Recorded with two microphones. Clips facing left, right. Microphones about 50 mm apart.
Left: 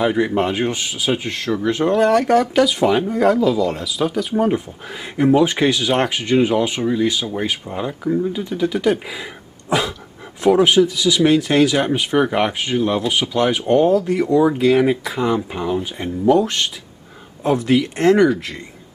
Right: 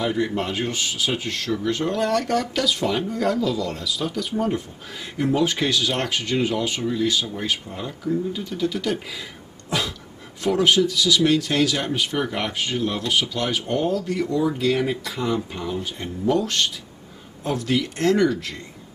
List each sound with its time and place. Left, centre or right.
0.0 s speech: left
3.5 s speech: centre
9.7 s a sound: centre
10.4 s speech: centre